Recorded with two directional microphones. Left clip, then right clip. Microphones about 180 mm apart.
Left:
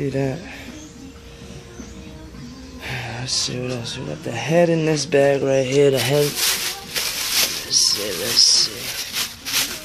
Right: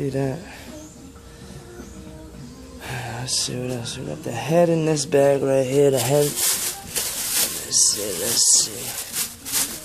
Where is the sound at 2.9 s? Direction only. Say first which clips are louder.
Left 2 dB; 5° right (ahead or behind).